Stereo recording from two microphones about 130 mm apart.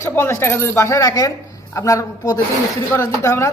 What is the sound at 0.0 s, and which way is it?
Speech, 20° left (ahead or behind).